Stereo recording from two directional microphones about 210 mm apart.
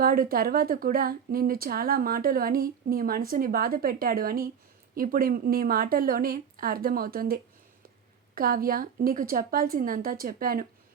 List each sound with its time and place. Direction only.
0.0 s a woman's voice: 45° right (ahead or behind)
8.4 s a woman's voice: 45° right (ahead or behind)